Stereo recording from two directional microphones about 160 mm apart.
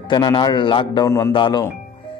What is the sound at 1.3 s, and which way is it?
Speech, 30° left (ahead or behind).